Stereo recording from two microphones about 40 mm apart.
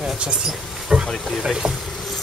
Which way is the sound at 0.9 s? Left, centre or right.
Right.